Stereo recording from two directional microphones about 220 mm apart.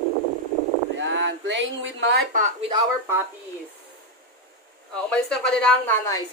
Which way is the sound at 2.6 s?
20° right (ahead or behind).